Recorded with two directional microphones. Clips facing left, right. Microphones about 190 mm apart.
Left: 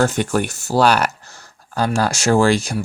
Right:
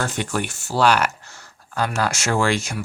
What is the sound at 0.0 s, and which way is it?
Speech, 45° left (ahead or behind).